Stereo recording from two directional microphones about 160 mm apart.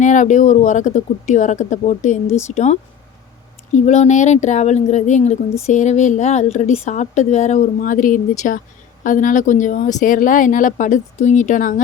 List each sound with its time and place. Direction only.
0.0 s a woman's voice: 50° left (ahead or behind)
3.7 s a woman's voice: 50° left (ahead or behind)